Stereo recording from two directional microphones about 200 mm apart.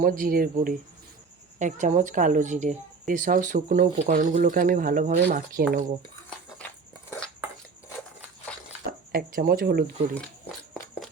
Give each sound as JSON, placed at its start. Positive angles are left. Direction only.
{"t": 0.0, "sound": "a woman's voice", "side_deg": -45}
{"t": 8.9, "sound": "speech", "side_deg": -45}